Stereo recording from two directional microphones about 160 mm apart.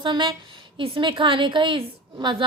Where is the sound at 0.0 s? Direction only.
30° right (ahead or behind).